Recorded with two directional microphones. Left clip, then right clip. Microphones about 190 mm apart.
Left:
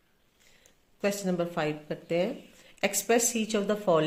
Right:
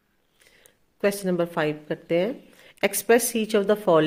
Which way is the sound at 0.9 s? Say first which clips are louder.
Right 6 dB; 50° right (ahead or behind).